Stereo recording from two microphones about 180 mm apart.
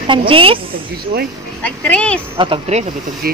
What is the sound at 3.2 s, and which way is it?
Speech, 55° right (ahead or behind).